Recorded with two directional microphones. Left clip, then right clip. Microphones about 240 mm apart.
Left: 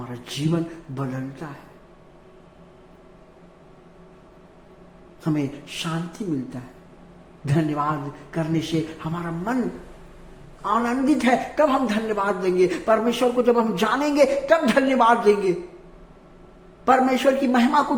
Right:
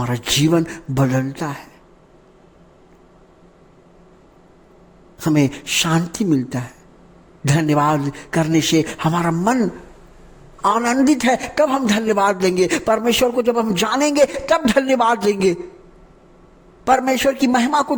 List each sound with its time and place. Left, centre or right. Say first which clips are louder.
0.0 s a man's voice: right 11 dB; right
5.2 s a man's voice: right 8 dB; right
10.6 s a man's voice: right 6 dB; right
16.8 s a man's voice: right 2 dB; right